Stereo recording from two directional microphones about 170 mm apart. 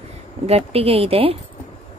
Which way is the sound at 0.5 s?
35° right (ahead or behind).